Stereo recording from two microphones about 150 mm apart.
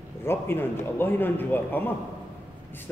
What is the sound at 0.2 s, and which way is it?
Speech, 15° left (ahead or behind).